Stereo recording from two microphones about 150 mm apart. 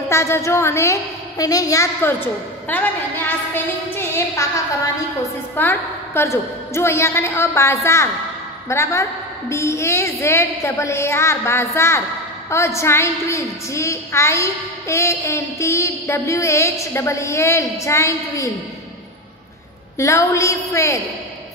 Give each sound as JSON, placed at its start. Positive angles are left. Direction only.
{"t": 0.1, "sound": "a woman's voice", "side_deg": 20}
{"t": 20.0, "sound": "a woman's voice", "side_deg": 20}